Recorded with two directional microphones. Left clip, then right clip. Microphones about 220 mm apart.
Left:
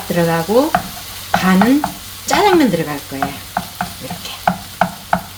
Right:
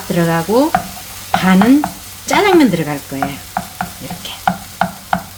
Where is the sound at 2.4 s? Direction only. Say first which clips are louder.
Right 1 dB; 25° right (ahead or behind).